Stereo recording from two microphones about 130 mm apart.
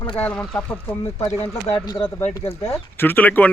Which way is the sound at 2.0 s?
15° left (ahead or behind).